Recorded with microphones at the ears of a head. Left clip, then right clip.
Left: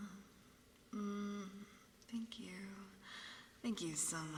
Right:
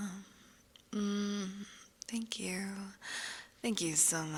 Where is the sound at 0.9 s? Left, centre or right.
Right.